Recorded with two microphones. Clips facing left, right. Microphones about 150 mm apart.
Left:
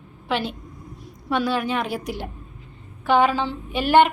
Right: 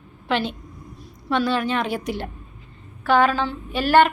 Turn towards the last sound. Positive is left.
turn(degrees=20)  # may be behind; listen again after turning